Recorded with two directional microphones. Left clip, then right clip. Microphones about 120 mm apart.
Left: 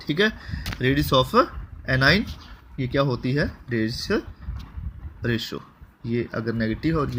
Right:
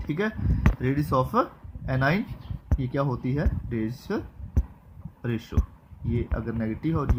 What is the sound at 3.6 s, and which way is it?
Speech, 20° left (ahead or behind).